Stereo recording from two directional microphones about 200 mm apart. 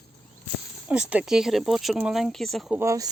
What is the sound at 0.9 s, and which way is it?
Speech, 5° right (ahead or behind).